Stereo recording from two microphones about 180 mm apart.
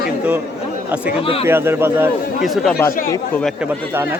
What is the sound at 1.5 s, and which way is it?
Speech, 15° right (ahead or behind).